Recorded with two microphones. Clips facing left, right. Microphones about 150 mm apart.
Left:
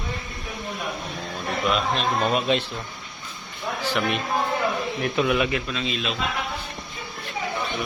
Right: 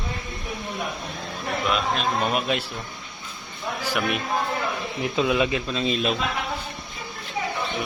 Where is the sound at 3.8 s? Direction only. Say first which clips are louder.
Left 1 dB; 10° right (ahead or behind).